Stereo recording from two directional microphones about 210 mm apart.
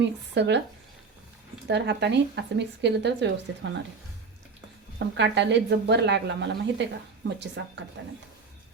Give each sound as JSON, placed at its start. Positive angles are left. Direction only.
{"t": 0.0, "sound": "speech", "side_deg": -55}
{"t": 1.6, "sound": "speech", "side_deg": -55}
{"t": 4.9, "sound": "speech", "side_deg": -55}